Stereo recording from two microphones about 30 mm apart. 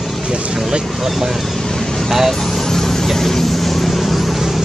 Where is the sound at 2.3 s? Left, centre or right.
Centre.